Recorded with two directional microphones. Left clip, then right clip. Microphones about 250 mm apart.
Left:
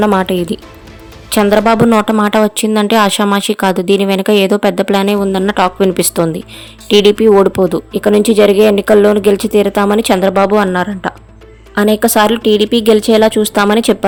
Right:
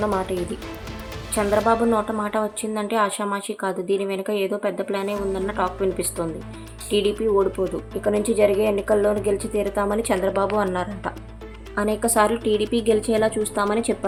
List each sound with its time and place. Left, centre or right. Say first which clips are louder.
0.0 s a woman's voice: left 11 dB; left